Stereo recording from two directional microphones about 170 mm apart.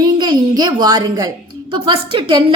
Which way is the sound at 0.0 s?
25° right (ahead or behind).